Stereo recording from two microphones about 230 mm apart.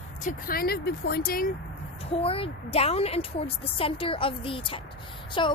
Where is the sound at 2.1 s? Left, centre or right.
Left.